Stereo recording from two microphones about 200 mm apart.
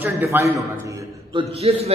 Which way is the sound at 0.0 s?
10° right (ahead or behind).